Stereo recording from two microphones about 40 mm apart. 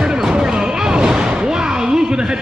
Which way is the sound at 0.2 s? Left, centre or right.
Centre.